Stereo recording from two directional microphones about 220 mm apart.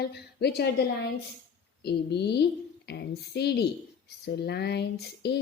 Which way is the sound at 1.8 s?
50° left (ahead or behind).